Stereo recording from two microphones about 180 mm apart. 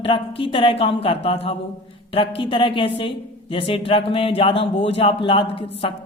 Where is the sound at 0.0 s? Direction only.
30° left (ahead or behind).